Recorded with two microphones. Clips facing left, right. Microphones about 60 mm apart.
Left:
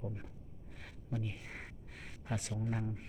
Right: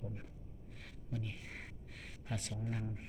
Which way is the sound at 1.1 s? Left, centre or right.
Left.